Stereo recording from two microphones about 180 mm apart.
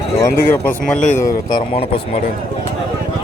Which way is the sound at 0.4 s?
10° left (ahead or behind).